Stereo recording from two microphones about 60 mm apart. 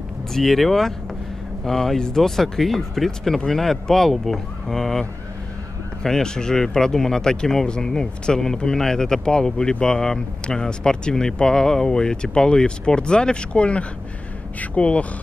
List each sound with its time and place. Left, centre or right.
0.3 s speech: centre
6.0 s speech: centre